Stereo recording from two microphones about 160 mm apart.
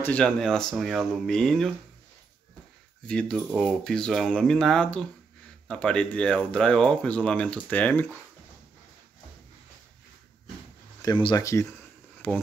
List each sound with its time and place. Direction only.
0.0 s speech: 5° left (ahead or behind)
3.1 s speech: 5° left (ahead or behind)
11.0 s speech: 25° left (ahead or behind)
12.2 s speech: 10° left (ahead or behind)